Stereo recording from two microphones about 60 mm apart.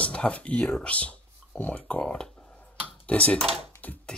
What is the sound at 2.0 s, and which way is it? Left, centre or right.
Speech, centre.